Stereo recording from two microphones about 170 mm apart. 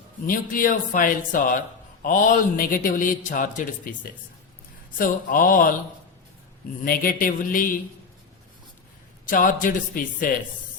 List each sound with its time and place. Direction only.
0.3 s a man's voice: 55° left (ahead or behind)
4.9 s a man's voice: 55° left (ahead or behind)
6.8 s speech: 60° left (ahead or behind)
9.2 s a man's voice: 50° left (ahead or behind)